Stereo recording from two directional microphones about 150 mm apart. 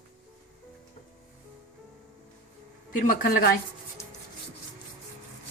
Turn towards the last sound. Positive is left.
turn(degrees=90)